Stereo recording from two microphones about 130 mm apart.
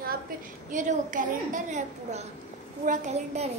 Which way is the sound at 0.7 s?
75° right (ahead or behind).